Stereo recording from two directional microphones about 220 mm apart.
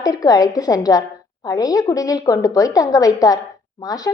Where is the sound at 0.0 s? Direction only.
15° left (ahead or behind).